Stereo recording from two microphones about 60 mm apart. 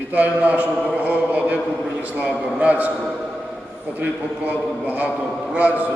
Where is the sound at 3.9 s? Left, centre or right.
Right.